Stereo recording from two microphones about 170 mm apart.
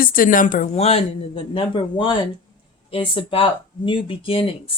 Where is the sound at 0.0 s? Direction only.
55° left (ahead or behind).